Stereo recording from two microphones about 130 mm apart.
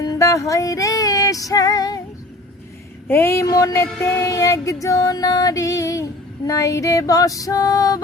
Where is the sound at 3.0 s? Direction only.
20° left (ahead or behind).